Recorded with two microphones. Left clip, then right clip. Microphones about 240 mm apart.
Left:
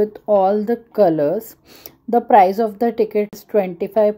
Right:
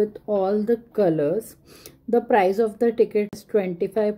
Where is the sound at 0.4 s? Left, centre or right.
Centre.